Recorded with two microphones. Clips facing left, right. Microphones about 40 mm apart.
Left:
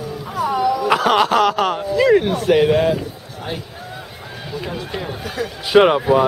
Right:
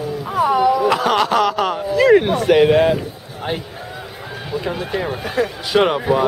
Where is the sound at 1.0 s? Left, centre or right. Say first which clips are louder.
Left 1 dB; centre.